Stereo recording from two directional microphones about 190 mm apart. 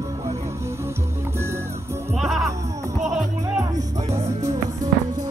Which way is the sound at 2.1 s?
Centre (ahead or behind).